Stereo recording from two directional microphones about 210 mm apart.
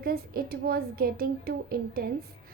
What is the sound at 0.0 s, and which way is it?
Child singing, 45° right (ahead or behind).